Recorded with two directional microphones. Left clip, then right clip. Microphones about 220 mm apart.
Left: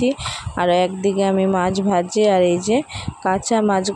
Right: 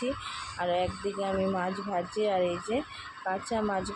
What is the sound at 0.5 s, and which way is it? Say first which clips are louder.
Speech: left 13 dB; 50° left (ahead or behind).